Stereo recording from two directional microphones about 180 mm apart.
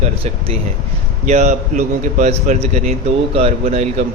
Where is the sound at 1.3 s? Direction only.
40° right (ahead or behind).